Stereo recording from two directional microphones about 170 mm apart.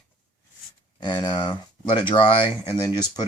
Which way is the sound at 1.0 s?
25° left (ahead or behind).